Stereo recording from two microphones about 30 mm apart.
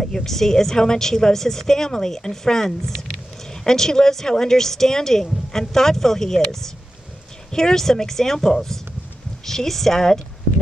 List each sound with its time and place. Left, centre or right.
0.0 s speech: centre